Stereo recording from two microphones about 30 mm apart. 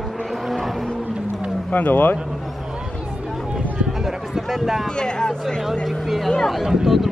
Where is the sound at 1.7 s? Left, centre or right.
Left.